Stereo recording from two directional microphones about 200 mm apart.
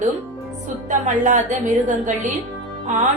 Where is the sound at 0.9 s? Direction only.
40° right (ahead or behind).